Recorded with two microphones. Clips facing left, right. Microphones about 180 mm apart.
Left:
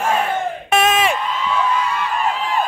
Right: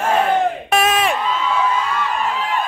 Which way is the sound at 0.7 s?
Centre (ahead or behind).